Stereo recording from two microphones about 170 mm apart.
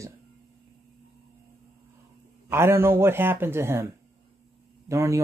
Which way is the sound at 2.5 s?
15° right (ahead or behind).